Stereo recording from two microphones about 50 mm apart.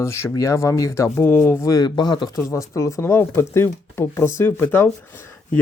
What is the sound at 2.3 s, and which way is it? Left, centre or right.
Speech, left.